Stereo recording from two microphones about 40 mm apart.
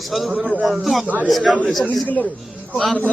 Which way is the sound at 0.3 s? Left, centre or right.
Centre.